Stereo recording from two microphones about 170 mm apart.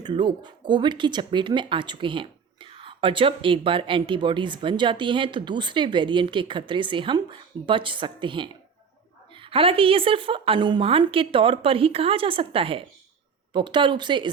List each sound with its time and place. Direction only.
0.0 s a woman's voice: 30° right (ahead or behind)